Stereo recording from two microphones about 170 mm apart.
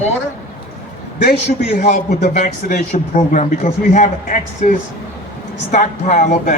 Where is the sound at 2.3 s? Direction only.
45° left (ahead or behind).